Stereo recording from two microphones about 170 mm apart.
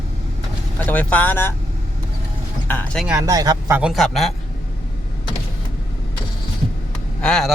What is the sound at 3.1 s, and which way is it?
Speech, 20° right (ahead or behind).